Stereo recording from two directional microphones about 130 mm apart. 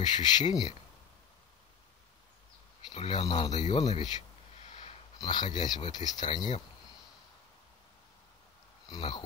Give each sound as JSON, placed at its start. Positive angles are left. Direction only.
{"t": 0.0, "sound": "speech", "side_deg": 35}
{"t": 2.9, "sound": "speech", "side_deg": 45}
{"t": 3.6, "sound": "speech", "side_deg": 55}
{"t": 4.6, "sound": "a sound", "side_deg": 60}
{"t": 5.2, "sound": "speech", "side_deg": 35}
{"t": 8.8, "sound": "speech", "side_deg": 35}